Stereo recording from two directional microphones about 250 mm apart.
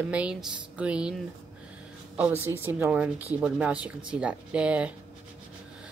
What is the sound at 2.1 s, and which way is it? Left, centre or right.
A woman's voice, centre.